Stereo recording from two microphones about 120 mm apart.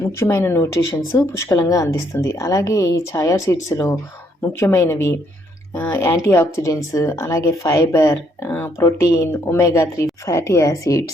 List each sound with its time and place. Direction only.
0.1 s speech: 20° left (ahead or behind)